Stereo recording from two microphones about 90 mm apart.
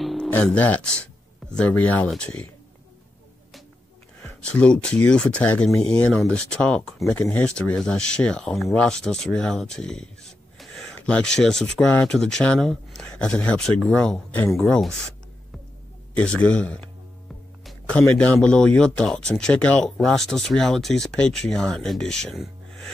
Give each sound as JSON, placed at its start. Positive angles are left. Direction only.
{"t": 0.0, "sound": "music", "side_deg": 0}
{"t": 0.3, "sound": "speech", "side_deg": 15}
{"t": 4.2, "sound": "speech", "side_deg": 15}
{"t": 16.2, "sound": "speech", "side_deg": 15}
{"t": 18.1, "sound": "speech", "side_deg": 15}